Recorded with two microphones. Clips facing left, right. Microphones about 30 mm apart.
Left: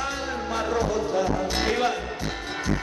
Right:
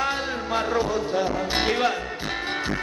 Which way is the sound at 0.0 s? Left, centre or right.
Right.